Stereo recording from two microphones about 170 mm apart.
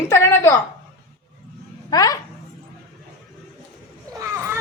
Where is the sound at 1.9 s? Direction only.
20° left (ahead or behind).